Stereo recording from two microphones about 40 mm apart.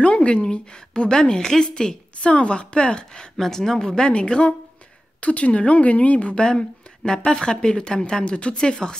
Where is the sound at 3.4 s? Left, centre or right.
Centre.